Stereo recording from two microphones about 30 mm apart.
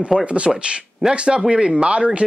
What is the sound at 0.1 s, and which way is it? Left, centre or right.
Speech, right.